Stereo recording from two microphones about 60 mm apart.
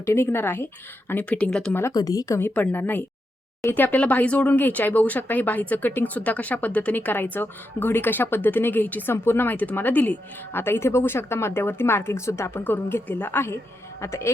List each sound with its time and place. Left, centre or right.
0.0 s a woman's voice: left
1.2 s speech: centre
1.9 s a woman's voice: left
2.4 s speech: left
12.6 s speech: left
14.0 s a woman's voice: left